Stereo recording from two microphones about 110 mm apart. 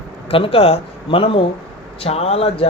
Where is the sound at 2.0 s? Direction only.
65° left (ahead or behind).